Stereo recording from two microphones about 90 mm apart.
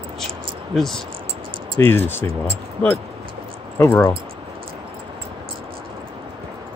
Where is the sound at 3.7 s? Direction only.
30° left (ahead or behind).